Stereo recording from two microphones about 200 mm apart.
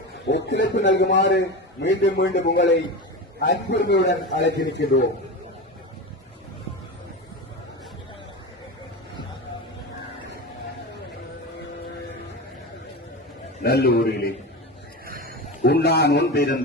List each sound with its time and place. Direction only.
0.3 s a man's voice: 60° left (ahead or behind)
13.6 s a man's voice: 50° left (ahead or behind)
15.0 s a sound: 45° right (ahead or behind)
15.6 s a man's voice: 55° left (ahead or behind)